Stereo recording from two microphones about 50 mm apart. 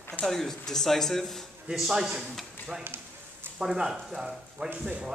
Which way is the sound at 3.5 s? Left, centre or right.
Centre.